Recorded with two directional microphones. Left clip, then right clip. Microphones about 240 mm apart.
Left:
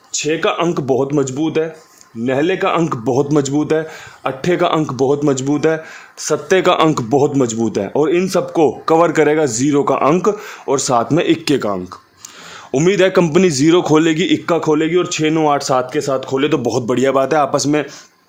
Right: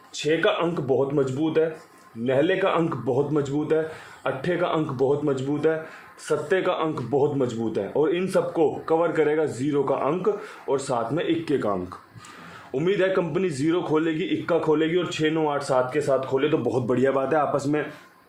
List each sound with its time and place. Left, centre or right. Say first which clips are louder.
0.3 s speech: left 5 dB; left